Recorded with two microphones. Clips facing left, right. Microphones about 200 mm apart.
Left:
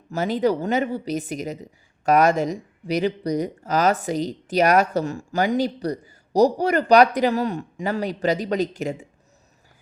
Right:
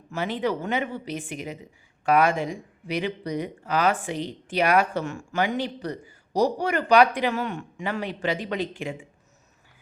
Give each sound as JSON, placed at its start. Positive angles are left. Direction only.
{"t": 0.1, "sound": "a woman's voice", "side_deg": 40}